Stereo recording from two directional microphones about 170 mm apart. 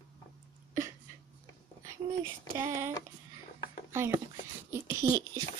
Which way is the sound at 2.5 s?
15° right (ahead or behind).